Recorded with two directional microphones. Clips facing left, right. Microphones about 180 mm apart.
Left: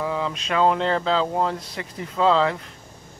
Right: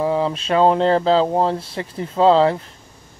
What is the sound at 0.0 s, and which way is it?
Speech, 35° right (ahead or behind).